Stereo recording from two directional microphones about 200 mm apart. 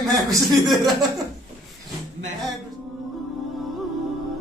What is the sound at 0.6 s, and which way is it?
Speech, centre (ahead or behind).